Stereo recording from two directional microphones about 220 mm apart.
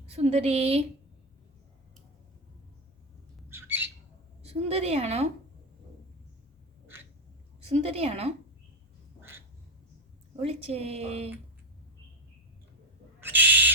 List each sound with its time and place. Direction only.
0.1 s a woman's voice: 30° right (ahead or behind)
3.5 s squawk: 10° right (ahead or behind)
4.4 s a woman's voice: 30° right (ahead or behind)
7.6 s a woman's voice: 30° right (ahead or behind)
10.4 s a woman's voice: 25° right (ahead or behind)
13.1 s owl: 10° right (ahead or behind)